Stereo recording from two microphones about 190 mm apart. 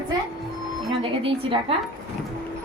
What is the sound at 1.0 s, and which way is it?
Speech, 25° right (ahead or behind).